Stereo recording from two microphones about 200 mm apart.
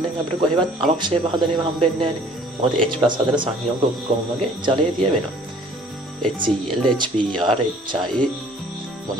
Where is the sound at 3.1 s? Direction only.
25° right (ahead or behind).